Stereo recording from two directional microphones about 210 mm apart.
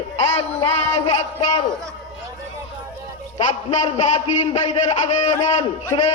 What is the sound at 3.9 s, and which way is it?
A man's voice, 30° left (ahead or behind).